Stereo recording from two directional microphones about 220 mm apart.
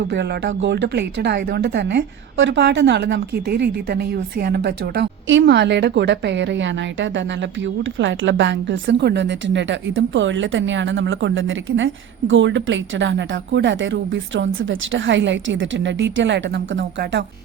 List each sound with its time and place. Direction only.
0.1 s speech: 50° right (ahead or behind)